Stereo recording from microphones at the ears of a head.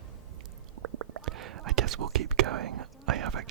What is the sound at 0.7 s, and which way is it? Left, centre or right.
Whispering, right.